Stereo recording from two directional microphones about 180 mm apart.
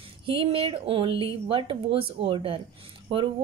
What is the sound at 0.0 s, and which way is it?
Speech, 30° right (ahead or behind).